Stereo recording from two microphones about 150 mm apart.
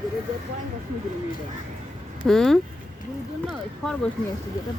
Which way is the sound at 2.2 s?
5° left (ahead or behind).